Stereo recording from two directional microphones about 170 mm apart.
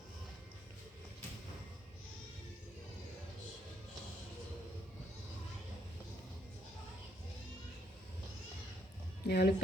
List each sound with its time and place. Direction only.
9.2 s speech: 70° left (ahead or behind)